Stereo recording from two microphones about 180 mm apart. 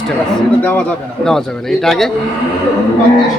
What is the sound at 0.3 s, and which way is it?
A man's voice, 10° left (ahead or behind).